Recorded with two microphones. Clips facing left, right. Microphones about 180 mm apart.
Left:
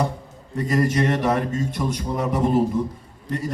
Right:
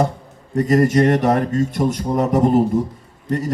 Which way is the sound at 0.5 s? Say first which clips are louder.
Right 6 dB; 45° right (ahead or behind).